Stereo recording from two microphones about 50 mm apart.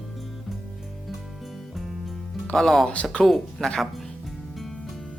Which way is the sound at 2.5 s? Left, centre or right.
Centre.